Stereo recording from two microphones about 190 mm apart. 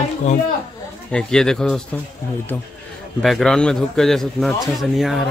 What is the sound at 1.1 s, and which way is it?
Speech, 5° left (ahead or behind).